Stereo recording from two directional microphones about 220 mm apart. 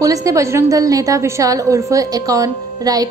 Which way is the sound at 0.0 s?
15° right (ahead or behind).